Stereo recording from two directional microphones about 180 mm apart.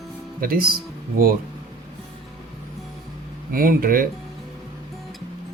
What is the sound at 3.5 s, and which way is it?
Speech, 50° right (ahead or behind).